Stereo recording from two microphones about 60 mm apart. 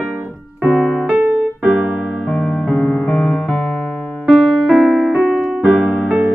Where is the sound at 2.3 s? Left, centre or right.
Centre.